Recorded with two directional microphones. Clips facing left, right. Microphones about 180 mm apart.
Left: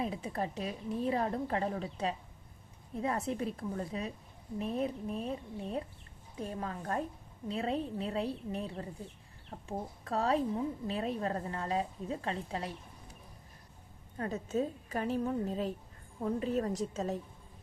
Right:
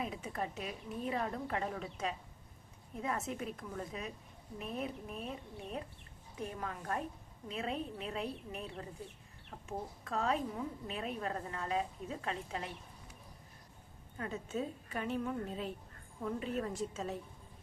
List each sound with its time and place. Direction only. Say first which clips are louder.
0.0 s a woman's voice: left 4 dB; 35° left (ahead or behind)
6.4 s a woman's voice: left 3 dB; 30° left (ahead or behind)
14.2 s a woman's voice: left 5 dB; 40° left (ahead or behind)